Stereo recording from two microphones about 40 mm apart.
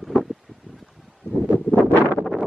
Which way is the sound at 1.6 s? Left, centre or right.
Left.